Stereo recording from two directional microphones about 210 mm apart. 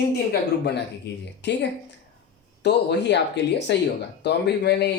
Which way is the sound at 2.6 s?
55° left (ahead or behind).